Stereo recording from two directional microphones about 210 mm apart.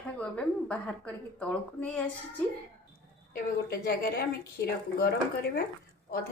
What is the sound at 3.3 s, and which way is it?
Speech, 45° left (ahead or behind).